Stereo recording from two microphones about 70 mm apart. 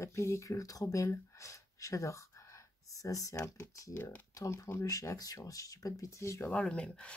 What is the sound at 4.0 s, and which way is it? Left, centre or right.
Speech, left.